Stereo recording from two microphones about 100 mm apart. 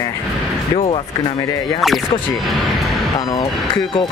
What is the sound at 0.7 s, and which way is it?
Speech, 65° left (ahead or behind).